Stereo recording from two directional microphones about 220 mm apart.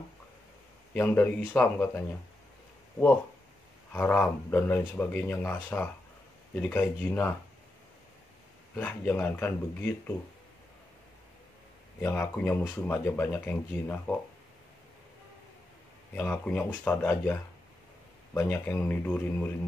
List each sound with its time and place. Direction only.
0.9 s speech: 10° left (ahead or behind)
3.9 s speech: 10° left (ahead or behind)
8.7 s speech: 10° left (ahead or behind)
12.0 s speech: 10° left (ahead or behind)
16.2 s speech: 5° left (ahead or behind)